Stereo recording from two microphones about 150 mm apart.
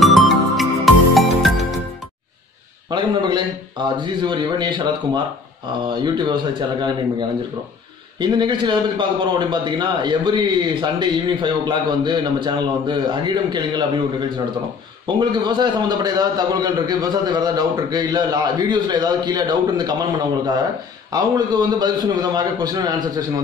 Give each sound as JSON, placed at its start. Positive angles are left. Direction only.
{"t": 0.0, "sound": "music", "side_deg": 0}
{"t": 2.9, "sound": "a man's voice", "side_deg": -30}
{"t": 21.1, "sound": "a man's voice", "side_deg": -25}